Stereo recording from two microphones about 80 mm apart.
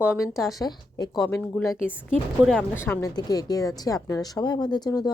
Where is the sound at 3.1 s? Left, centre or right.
Left.